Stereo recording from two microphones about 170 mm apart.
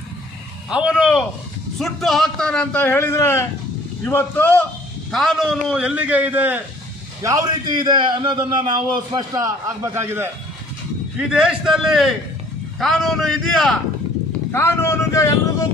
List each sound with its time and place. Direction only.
0.7 s a man's voice: 5° right (ahead or behind); by 4.6 s 10° left (ahead or behind)
5.1 s a man's voice: centre (ahead or behind)
7.2 s a man's voice: 20° right (ahead or behind); by 13.7 s 5° left (ahead or behind)
14.5 s a man's voice: 15° left (ahead or behind)